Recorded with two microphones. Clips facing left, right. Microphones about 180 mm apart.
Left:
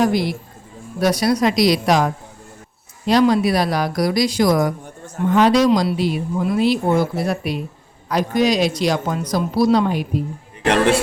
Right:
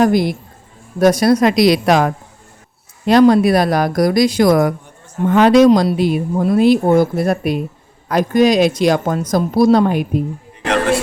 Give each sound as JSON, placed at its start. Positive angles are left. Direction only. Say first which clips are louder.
{"t": 0.0, "sound": "speech", "louder": "right 4 dB", "side_deg": -50}